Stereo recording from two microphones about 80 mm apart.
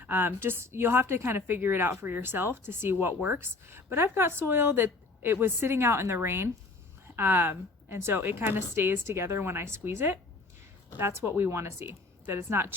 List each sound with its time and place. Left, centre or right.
0.0 s a woman's voice: right